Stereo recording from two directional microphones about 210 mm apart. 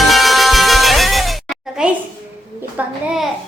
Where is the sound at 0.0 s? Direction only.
Centre (ahead or behind).